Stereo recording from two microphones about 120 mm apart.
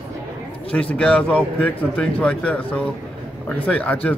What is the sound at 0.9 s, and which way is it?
Speech, 10° left (ahead or behind).